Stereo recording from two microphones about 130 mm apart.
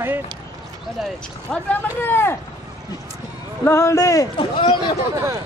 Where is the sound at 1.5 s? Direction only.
15° left (ahead or behind).